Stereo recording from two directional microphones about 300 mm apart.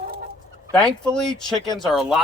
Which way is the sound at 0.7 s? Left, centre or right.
Centre.